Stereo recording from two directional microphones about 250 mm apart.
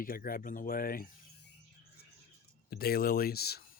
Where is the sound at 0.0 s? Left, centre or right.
Left.